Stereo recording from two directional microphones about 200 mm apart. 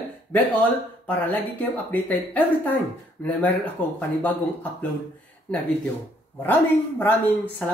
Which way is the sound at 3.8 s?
10° left (ahead or behind).